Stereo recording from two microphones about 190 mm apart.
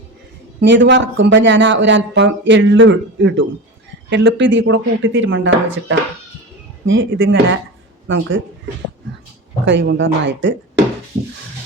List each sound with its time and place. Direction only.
0.6 s speech: 70° right (ahead or behind)
9.6 s speech: 70° right (ahead or behind)